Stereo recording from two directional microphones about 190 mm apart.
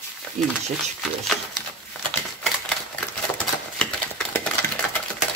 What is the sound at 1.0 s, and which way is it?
Speech, centre (ahead or behind).